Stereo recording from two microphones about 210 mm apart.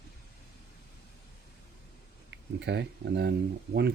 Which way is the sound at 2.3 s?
55° right (ahead or behind).